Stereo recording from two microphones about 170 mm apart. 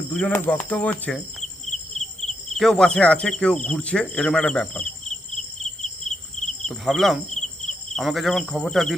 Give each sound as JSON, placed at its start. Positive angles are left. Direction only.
{"t": 0.1, "sound": "speech", "side_deg": 5}
{"t": 2.5, "sound": "cricket", "side_deg": 0}
{"t": 6.1, "sound": "insect", "side_deg": 45}
{"t": 6.7, "sound": "cricket", "side_deg": 0}
{"t": 7.3, "sound": "insect", "side_deg": 45}
{"t": 7.9, "sound": "cricket", "side_deg": 0}